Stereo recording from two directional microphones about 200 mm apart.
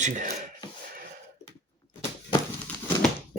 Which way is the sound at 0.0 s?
40° right (ahead or behind).